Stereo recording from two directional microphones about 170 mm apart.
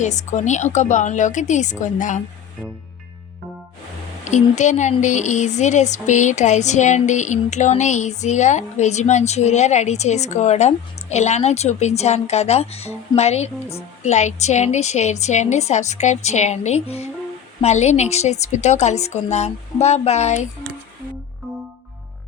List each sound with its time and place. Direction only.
0.0 s speech: 45° left (ahead or behind)
4.2 s a woman's voice: 45° left (ahead or behind)
21.4 s music: centre (ahead or behind)